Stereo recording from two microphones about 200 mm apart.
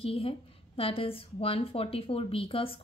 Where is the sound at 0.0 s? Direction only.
30° left (ahead or behind).